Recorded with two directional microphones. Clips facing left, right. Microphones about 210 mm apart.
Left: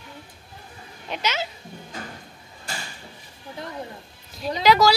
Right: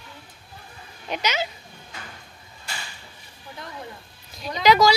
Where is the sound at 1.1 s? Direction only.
Centre (ahead or behind).